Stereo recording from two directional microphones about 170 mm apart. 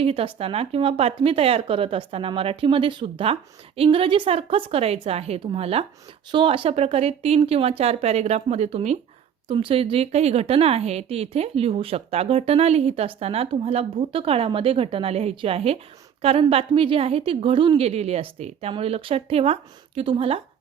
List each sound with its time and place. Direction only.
0.0 s speech: 35° right (ahead or behind)